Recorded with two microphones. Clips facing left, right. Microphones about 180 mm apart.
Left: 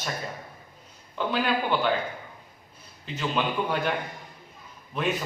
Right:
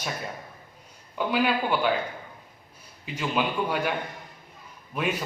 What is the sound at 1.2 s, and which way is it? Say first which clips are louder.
Speech: right 1 dB; 10° right (ahead or behind).